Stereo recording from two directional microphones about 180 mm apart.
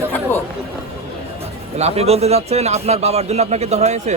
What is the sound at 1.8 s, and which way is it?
A man's voice, 35° right (ahead or behind).